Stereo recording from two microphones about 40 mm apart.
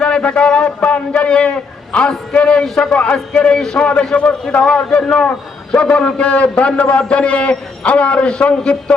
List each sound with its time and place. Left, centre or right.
0.0 s a man's voice: left